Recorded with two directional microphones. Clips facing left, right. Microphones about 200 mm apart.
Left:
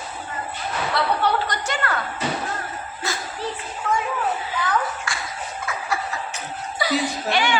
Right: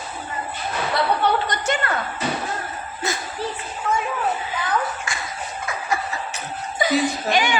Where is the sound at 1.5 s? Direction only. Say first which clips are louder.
Right 3 dB; 20° right (ahead or behind).